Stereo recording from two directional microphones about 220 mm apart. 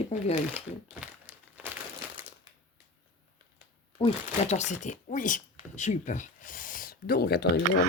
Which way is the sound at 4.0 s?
30° left (ahead or behind).